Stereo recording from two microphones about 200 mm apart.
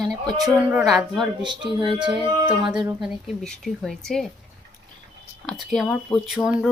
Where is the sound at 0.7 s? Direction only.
Centre (ahead or behind).